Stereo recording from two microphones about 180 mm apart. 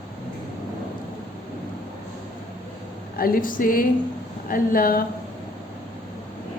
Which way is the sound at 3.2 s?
50° left (ahead or behind).